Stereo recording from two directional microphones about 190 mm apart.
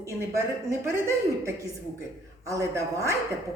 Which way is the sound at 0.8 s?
15° right (ahead or behind).